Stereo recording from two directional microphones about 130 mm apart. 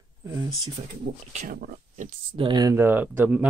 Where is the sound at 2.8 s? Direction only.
15° right (ahead or behind).